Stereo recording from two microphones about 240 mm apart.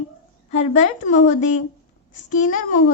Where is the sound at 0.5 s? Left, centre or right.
Left.